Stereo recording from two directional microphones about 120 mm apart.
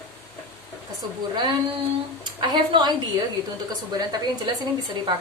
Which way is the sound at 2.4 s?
40° right (ahead or behind).